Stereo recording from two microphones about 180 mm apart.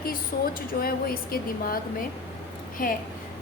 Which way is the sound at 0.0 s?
55° left (ahead or behind).